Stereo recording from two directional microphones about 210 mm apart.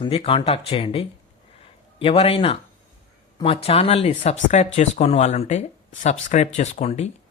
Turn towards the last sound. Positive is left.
turn(degrees=30)  # may be behind; listen again after turning